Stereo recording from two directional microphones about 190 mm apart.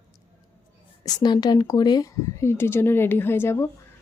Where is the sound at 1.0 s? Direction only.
20° left (ahead or behind).